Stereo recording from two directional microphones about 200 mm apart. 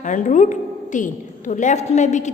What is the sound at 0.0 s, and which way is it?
A woman's voice, 40° left (ahead or behind).